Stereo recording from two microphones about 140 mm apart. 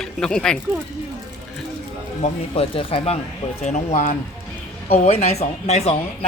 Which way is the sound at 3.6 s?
55° left (ahead or behind).